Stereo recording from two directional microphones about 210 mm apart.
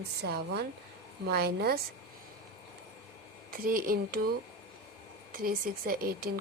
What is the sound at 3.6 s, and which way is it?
Speech, 45° right (ahead or behind).